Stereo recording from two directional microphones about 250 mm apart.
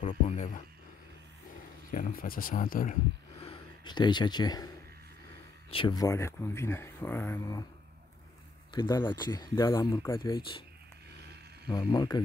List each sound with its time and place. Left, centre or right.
0.0 s a sound: left
1.9 s speech: left
3.3 s a sound: left
5.7 s speech: centre
8.7 s speech: centre
11.6 s speech: centre